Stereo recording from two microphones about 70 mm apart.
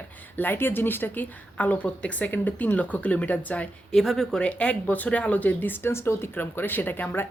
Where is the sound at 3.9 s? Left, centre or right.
Centre.